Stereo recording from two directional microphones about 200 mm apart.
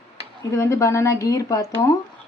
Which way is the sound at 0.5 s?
15° left (ahead or behind).